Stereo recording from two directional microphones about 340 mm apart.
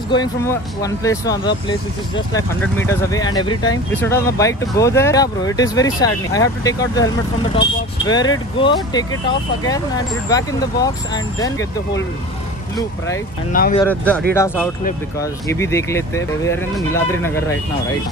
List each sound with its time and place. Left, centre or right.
0.1 s speech: centre
8.1 s speech: centre
10.3 s speech: centre
13.5 s speech: left
13.7 s speech: centre